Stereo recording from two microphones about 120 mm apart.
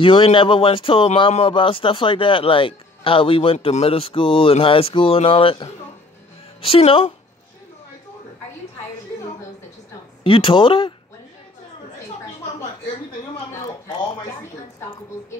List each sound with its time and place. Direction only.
0.0 s speech: 45° left (ahead or behind)
10.2 s speech: 45° left (ahead or behind)